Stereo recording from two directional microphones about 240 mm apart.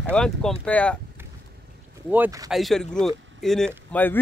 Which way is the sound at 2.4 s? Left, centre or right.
Centre.